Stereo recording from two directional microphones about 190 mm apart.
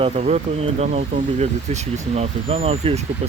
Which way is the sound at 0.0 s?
35° right (ahead or behind).